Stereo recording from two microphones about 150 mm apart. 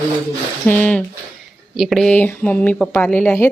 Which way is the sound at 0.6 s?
10° left (ahead or behind).